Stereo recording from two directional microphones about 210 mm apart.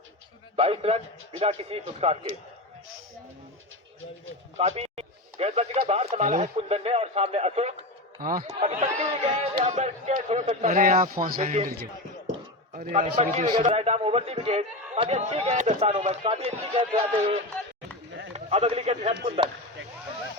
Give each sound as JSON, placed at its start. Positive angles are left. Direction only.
{"t": 0.5, "sound": "a man's voice", "side_deg": -25}
{"t": 4.5, "sound": "a man's voice", "side_deg": -30}
{"t": 8.2, "sound": "a man's voice", "side_deg": -40}
{"t": 12.7, "sound": "a man's voice", "side_deg": -35}
{"t": 18.3, "sound": "speech", "side_deg": -30}